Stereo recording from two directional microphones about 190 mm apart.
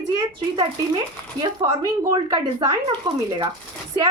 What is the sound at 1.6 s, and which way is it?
Speech, 20° right (ahead or behind).